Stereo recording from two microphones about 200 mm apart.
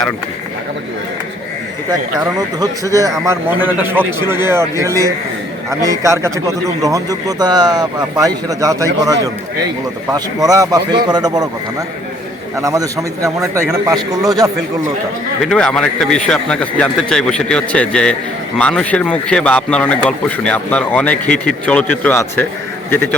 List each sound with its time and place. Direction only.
2.2 s speech: 15° right (ahead or behind)
12.5 s speech: 15° right (ahead or behind)
15.4 s a man's voice: 5° left (ahead or behind)